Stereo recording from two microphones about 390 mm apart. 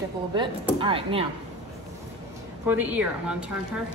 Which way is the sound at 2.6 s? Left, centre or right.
Centre.